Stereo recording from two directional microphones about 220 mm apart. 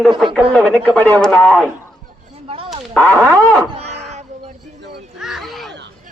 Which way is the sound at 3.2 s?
15° right (ahead or behind).